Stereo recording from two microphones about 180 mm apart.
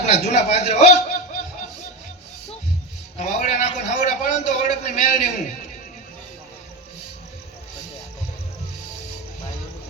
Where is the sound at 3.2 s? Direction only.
40° left (ahead or behind).